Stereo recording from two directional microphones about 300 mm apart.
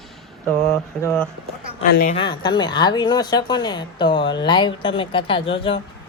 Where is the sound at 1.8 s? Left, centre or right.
Left.